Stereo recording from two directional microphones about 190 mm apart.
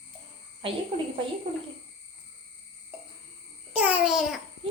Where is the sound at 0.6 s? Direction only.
25° right (ahead or behind).